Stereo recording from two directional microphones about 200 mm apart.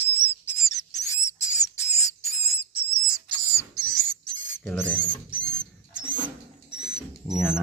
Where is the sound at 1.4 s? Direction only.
35° left (ahead or behind).